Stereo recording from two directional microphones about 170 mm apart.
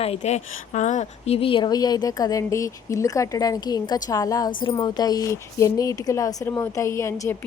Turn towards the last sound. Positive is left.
turn(degrees=20)  # may be behind; listen again after turning